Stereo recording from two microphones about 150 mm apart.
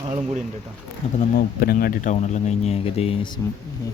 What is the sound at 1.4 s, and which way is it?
Speech, 85° left.